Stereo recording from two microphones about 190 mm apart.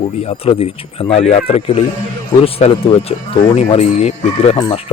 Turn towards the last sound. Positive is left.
turn(degrees=25)  # may be behind; listen again after turning